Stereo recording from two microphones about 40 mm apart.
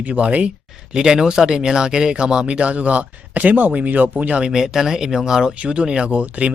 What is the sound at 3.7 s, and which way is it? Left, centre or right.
Speech, right.